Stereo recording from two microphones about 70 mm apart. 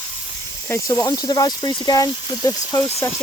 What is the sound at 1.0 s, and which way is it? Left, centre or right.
Speech, left.